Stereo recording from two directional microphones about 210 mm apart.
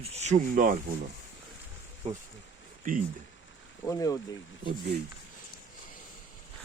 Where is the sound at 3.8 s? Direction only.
15° left (ahead or behind).